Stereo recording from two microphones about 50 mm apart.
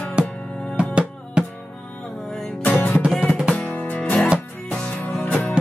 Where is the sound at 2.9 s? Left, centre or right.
Centre.